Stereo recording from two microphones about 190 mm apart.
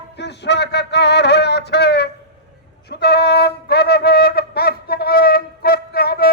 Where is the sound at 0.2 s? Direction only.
65° left (ahead or behind).